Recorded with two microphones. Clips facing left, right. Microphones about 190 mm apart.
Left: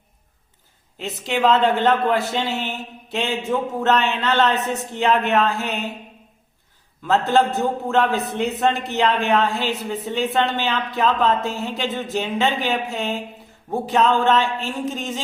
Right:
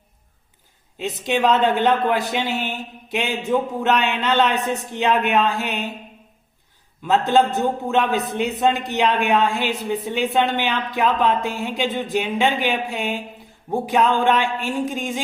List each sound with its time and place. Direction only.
0.9 s a man's voice: 15° right (ahead or behind)
7.0 s a man's voice: 15° right (ahead or behind)